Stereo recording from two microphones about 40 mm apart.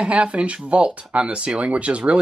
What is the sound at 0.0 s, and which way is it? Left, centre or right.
Speech, right.